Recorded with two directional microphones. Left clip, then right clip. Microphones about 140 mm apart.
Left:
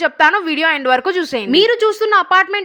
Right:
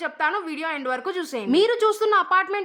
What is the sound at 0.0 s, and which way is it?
A woman's voice, 40° left (ahead or behind).